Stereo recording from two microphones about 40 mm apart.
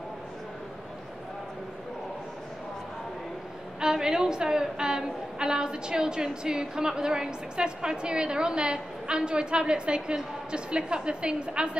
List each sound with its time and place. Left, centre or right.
3.8 s a woman's voice: centre